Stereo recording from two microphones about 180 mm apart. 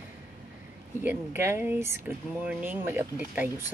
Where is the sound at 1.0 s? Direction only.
15° right (ahead or behind).